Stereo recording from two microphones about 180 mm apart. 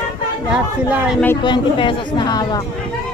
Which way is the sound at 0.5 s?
5° right (ahead or behind).